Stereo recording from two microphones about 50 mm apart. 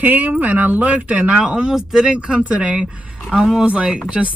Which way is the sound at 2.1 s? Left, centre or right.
Right.